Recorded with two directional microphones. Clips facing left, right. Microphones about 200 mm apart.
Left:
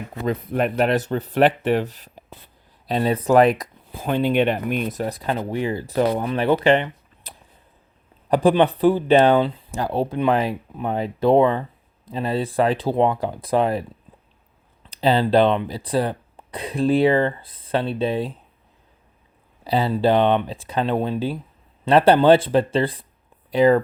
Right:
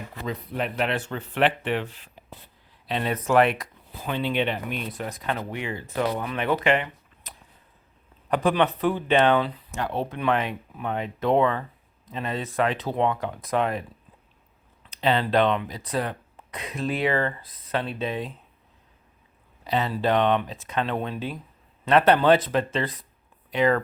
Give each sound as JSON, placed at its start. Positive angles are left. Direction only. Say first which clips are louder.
{"t": 0.3, "sound": "speech", "louder": "left 8 dB", "side_deg": 50}
{"t": 7.3, "sound": "a sound", "louder": "left 3 dB", "side_deg": 35}
{"t": 8.3, "sound": "speech", "louder": "left 6 dB", "side_deg": 30}
{"t": 14.8, "sound": "speech", "louder": "left 5 dB", "side_deg": 35}
{"t": 19.6, "sound": "speech", "louder": "left 5 dB", "side_deg": 30}